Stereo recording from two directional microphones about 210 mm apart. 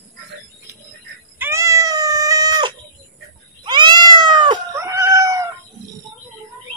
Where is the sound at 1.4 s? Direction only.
15° right (ahead or behind).